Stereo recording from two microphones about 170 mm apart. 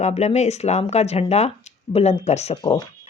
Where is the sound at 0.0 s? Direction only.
40° left (ahead or behind).